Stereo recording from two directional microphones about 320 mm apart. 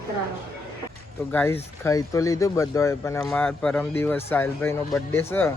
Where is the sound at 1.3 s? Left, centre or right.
Centre.